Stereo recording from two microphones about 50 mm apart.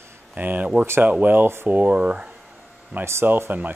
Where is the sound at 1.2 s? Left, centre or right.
Right.